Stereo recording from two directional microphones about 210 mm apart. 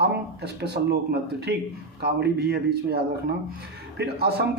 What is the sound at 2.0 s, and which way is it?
Speech, 50° right (ahead or behind).